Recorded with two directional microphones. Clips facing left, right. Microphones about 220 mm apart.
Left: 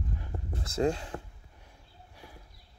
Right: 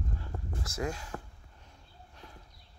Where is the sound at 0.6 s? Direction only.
30° left (ahead or behind).